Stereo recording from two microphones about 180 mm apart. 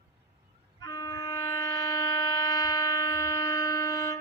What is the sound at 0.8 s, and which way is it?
Train, 20° left (ahead or behind).